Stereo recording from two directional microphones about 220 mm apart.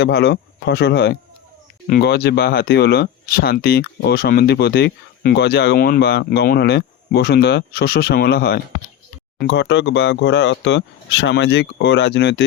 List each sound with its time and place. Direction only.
0.0 s speech: 50° left (ahead or behind)